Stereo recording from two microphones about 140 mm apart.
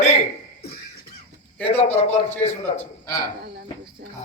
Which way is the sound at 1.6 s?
45° left (ahead or behind).